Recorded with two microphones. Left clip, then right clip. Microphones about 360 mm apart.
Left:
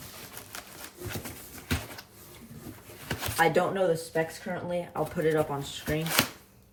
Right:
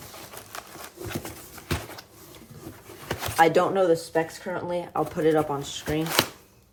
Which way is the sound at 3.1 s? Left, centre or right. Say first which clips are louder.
Right 5 dB; centre.